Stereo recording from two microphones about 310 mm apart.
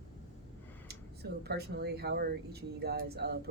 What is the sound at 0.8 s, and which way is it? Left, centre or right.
Speech, right.